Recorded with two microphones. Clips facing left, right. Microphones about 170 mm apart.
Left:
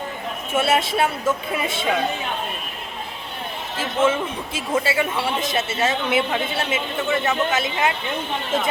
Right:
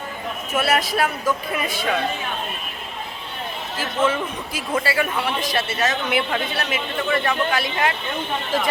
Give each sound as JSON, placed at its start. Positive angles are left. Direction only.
{"t": 0.5, "sound": "a man's voice", "side_deg": 25}
{"t": 3.8, "sound": "a man's voice", "side_deg": 25}